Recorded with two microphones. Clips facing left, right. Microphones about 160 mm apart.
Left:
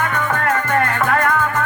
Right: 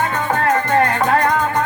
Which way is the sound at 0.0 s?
25° right (ahead or behind).